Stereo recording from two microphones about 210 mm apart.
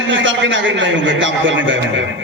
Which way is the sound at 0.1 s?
65° right (ahead or behind).